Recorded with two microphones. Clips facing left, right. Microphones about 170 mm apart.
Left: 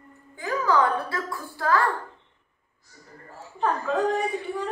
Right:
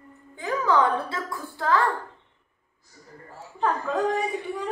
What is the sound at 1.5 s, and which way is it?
Speech, 20° right (ahead or behind).